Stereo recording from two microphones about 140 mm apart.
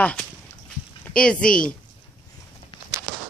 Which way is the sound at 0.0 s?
10° left (ahead or behind).